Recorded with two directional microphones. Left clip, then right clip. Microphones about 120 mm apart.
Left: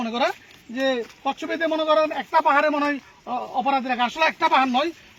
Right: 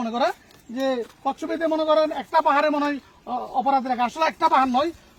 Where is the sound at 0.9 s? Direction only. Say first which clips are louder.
Left 1 dB; 10° left (ahead or behind); by 3.4 s 30° left (ahead or behind).